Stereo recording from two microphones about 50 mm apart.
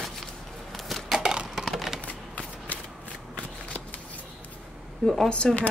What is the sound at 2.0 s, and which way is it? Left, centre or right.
Shuffling cards, left.